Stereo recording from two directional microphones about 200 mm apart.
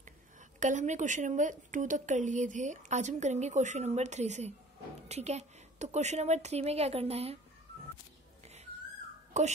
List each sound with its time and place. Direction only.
0.6 s speech: 40° right (ahead or behind)
9.3 s a child's voice: 35° right (ahead or behind)